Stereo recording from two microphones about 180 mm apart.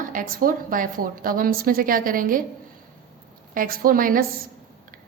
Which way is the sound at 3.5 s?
50° right (ahead or behind).